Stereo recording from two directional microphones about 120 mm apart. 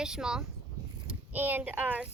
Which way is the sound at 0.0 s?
5° right (ahead or behind).